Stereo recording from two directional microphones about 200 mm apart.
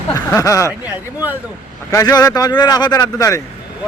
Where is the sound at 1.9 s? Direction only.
20° left (ahead or behind).